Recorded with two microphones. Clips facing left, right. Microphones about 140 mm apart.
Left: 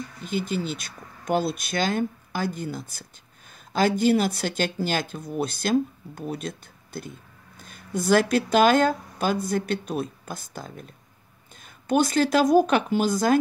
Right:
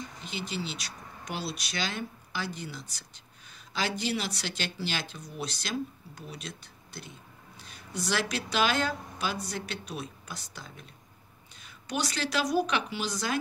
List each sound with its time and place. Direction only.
0.2 s speech: 50° left (ahead or behind)